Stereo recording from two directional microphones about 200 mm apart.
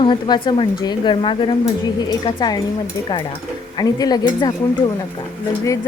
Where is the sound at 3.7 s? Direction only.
20° left (ahead or behind).